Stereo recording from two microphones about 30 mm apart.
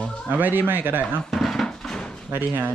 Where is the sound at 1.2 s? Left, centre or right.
Centre.